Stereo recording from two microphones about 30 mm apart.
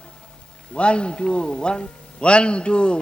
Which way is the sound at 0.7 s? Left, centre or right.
Left.